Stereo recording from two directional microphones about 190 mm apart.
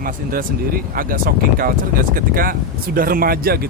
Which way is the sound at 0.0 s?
50° right (ahead or behind).